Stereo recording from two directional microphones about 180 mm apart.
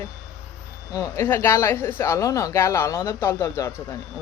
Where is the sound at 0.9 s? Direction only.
20° left (ahead or behind).